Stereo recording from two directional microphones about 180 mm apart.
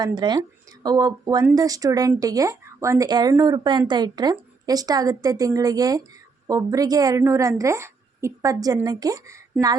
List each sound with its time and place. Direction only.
0.0 s speech: 25° right (ahead or behind)